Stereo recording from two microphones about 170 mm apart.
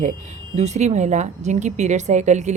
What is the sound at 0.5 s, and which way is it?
Speech, 40° right (ahead or behind).